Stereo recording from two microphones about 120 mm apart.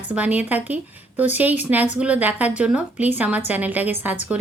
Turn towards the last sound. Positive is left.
turn(degrees=-15)  # may be behind; listen again after turning